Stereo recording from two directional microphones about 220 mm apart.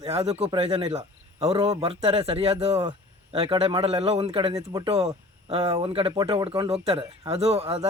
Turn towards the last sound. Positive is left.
turn(degrees=-25)  # may be behind; listen again after turning